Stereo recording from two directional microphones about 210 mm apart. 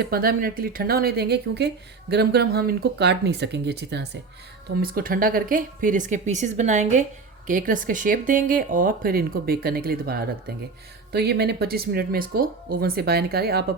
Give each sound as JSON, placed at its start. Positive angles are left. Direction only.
{"t": 0.0, "sound": "speech", "side_deg": -45}